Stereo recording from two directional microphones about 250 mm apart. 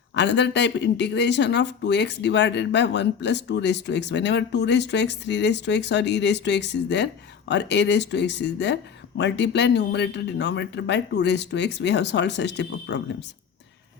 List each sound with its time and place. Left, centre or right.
0.1 s speech: left